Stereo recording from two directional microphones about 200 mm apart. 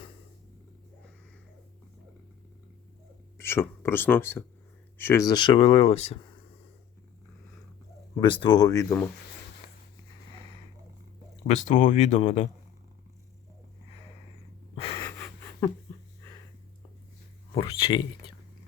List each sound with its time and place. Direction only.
3.3 s speech: 10° left (ahead or behind)
8.1 s speech: 25° left (ahead or behind)
11.4 s speech: 35° left (ahead or behind)
14.8 s gasp: 30° left (ahead or behind)
15.6 s dog: 15° left (ahead or behind)
17.5 s speech: 25° left (ahead or behind)